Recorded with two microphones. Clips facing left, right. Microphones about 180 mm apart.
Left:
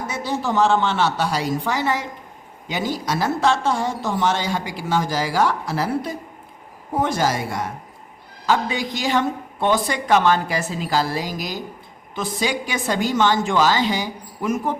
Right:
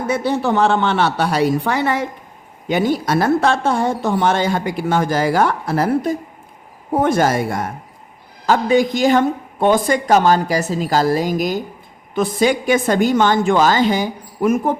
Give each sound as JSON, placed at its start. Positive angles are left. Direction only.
{"t": 0.1, "sound": "a woman's voice", "side_deg": -60}